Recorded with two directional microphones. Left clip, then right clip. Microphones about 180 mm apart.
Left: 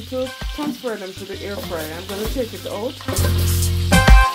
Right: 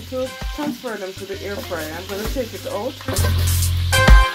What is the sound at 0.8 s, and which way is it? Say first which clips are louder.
Frying: left 1 dB; 40° left (ahead or behind).